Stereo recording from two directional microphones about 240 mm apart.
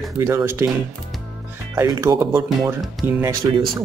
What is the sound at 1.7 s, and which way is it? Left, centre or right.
Speech, centre.